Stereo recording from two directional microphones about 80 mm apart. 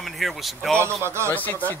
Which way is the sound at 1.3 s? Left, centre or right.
Left.